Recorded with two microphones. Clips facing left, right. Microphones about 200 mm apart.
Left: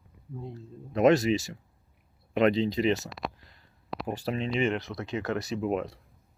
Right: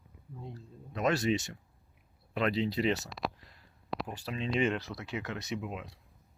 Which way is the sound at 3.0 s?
Centre (ahead or behind).